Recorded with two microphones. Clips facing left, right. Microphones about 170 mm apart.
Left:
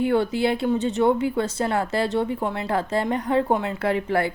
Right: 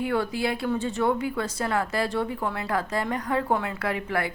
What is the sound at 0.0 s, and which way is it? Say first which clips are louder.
Speech: left 5 dB; 25° left (ahead or behind).